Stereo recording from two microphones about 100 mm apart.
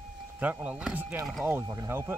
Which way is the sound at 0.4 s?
15° right (ahead or behind).